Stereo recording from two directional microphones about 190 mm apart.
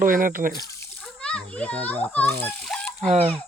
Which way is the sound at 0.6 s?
15° left (ahead or behind).